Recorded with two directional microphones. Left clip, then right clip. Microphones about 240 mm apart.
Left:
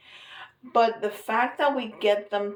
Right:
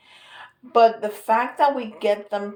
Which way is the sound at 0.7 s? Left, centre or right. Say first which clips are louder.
Right 6 dB; right.